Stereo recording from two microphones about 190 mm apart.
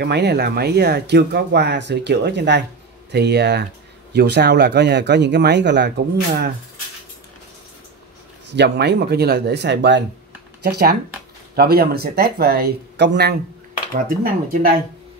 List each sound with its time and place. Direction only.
0.0 s speech: 60° right (ahead or behind)
8.5 s speech: 65° right (ahead or behind)
10.6 s speech: 55° right (ahead or behind)
13.9 s speech: 45° right (ahead or behind)